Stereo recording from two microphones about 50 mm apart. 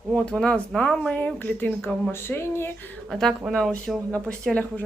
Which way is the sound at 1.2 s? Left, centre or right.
Left.